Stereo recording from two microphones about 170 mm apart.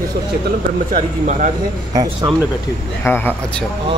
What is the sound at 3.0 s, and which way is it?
Speech, 10° left (ahead or behind).